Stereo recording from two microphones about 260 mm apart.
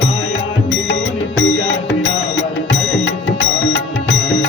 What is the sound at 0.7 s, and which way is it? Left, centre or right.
Music, left.